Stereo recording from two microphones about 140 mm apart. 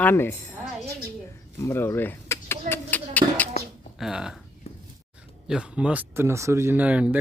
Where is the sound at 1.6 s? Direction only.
15° left (ahead or behind).